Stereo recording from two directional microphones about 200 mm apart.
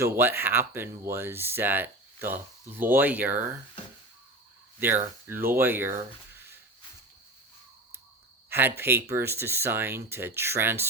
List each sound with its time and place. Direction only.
0.0 s speech: 10° right (ahead or behind)
5.5 s speech: 10° right (ahead or behind)
8.4 s speech: 10° right (ahead or behind)